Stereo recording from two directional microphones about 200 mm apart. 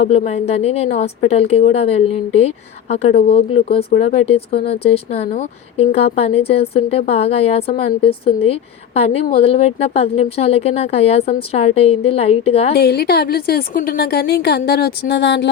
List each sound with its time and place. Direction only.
0.1 s speech: 30° left (ahead or behind)
12.7 s a woman's voice: 55° left (ahead or behind)